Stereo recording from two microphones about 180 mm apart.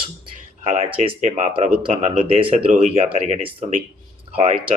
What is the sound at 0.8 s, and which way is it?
Speech, 35° right (ahead or behind).